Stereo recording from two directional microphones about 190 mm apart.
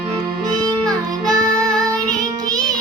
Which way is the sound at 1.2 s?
5° left (ahead or behind).